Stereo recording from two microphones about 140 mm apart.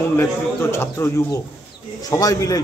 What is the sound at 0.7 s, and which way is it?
A man's voice, 20° left (ahead or behind).